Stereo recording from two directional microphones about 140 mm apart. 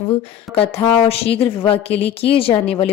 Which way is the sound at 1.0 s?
45° left (ahead or behind).